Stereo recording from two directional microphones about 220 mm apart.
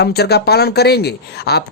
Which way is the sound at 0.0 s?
45° left (ahead or behind).